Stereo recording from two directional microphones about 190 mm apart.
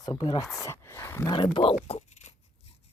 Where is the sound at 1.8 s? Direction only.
35° left (ahead or behind).